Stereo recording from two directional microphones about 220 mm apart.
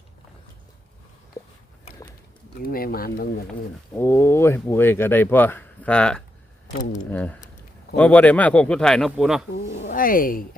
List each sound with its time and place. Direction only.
1.4 s a sound: 15° left (ahead or behind)
2.6 s speech: 40° left (ahead or behind)
3.9 s speech: 10° left (ahead or behind)
9.8 s speech: 40° left (ahead or behind)